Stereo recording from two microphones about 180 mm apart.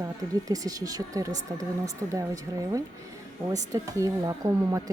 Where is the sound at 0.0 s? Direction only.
20° right (ahead or behind).